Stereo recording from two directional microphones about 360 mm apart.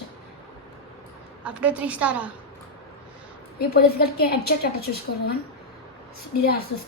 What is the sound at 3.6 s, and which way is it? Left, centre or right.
A woman's voice, left.